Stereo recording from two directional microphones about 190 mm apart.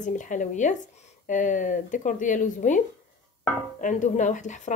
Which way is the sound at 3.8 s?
40° left (ahead or behind).